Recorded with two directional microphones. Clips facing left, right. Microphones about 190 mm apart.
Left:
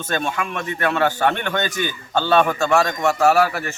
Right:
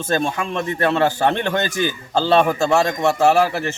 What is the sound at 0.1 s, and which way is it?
A man's voice, 30° right (ahead or behind).